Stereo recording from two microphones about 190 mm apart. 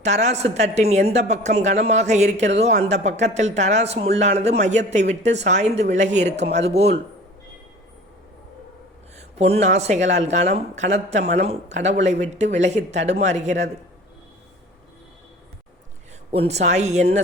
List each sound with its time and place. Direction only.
0.0 s speech: 35° right (ahead or behind)
9.1 s speech: 35° right (ahead or behind)
16.5 s speech: 35° right (ahead or behind)